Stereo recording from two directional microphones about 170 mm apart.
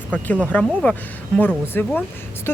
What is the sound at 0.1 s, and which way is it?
Speech, 10° left (ahead or behind).